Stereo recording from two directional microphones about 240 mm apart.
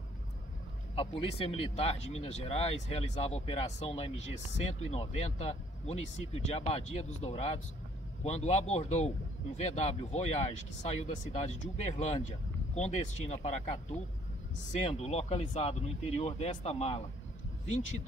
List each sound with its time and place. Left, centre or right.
0.9 s speech: left